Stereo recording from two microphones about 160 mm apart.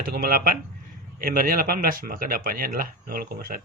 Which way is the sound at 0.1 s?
65° right (ahead or behind).